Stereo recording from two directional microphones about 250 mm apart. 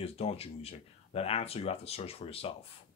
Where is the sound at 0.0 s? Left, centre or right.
Left.